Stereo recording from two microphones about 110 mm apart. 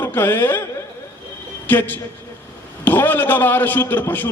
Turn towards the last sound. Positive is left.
turn(degrees=15)  # may be behind; listen again after turning